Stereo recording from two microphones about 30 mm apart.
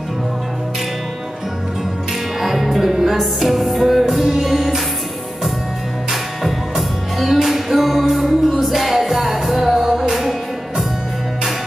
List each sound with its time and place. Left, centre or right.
2.4 s music: centre
7.2 s music: centre
9.8 s music: centre